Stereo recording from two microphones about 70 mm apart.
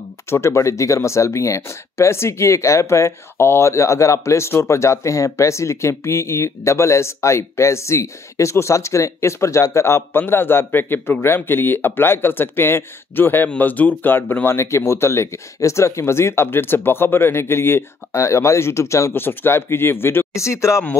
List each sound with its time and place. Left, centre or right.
0.3 s speech: left